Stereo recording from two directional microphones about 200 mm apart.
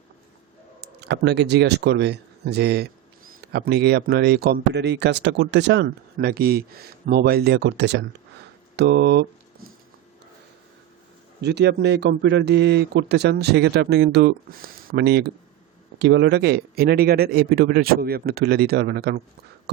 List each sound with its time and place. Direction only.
0.8 s speech: 60° right (ahead or behind)
11.3 s speech: 55° right (ahead or behind)